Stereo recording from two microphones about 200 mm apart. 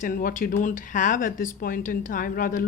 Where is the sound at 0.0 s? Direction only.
45° left (ahead or behind).